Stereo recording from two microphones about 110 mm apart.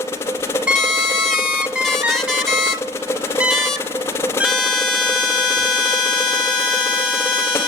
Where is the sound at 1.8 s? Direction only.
5° left (ahead or behind).